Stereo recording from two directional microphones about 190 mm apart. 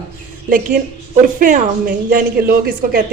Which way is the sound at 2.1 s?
50° right (ahead or behind).